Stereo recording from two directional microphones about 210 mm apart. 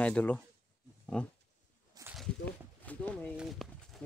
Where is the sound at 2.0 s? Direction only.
15° right (ahead or behind).